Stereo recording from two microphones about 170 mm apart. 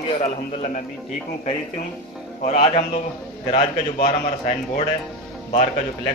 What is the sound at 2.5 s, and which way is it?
Speech, 35° left (ahead or behind).